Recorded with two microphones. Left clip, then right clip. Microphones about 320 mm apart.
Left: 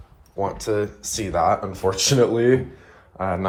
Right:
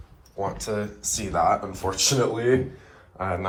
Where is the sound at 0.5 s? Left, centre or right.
Centre.